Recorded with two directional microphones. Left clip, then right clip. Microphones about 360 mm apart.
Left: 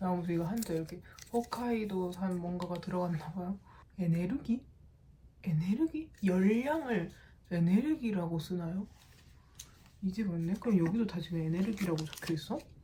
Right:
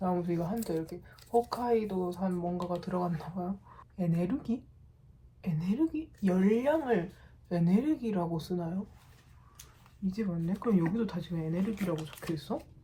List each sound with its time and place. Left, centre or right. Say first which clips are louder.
0.0 s speech: right 3 dB; centre
10.1 s speech: right 2 dB; centre